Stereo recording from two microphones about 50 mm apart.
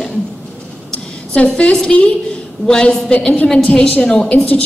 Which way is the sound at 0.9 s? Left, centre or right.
Left.